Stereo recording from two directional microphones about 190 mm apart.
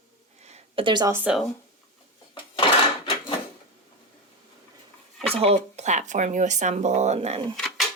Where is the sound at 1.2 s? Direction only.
5° right (ahead or behind).